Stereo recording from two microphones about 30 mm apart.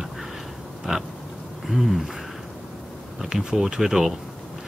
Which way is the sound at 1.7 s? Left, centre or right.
Centre.